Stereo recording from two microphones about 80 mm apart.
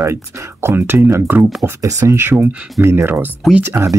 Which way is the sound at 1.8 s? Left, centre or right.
Right.